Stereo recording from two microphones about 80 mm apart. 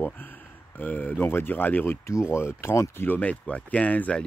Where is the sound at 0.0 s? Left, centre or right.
Left.